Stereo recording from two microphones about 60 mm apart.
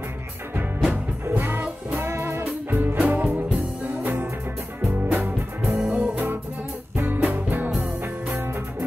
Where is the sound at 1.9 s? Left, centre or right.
Right.